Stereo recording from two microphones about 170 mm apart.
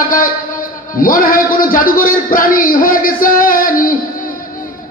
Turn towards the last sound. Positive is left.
turn(degrees=55)  # may be behind; listen again after turning